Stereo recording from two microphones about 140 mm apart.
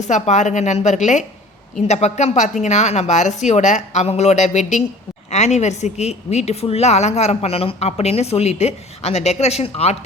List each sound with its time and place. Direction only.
0.0 s a woman's voice: 55° left (ahead or behind)